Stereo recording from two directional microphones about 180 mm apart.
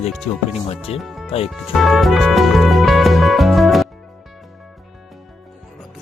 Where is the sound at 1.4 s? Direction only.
Centre (ahead or behind).